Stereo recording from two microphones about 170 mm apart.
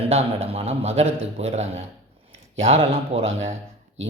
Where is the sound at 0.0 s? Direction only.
35° right (ahead or behind).